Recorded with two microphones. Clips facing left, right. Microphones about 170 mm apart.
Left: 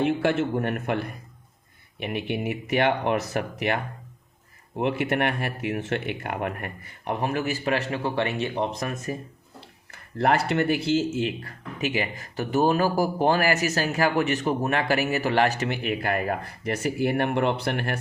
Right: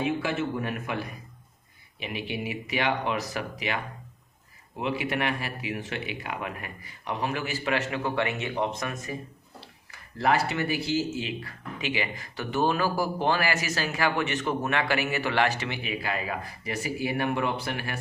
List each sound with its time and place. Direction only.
0.0 s speech: 65° left (ahead or behind)
4.8 s speech: 55° left (ahead or behind)
7.3 s a man's voice: 40° left (ahead or behind)
9.9 s speech: 55° left (ahead or behind)